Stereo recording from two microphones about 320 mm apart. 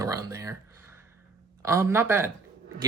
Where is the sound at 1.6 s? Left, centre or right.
Centre.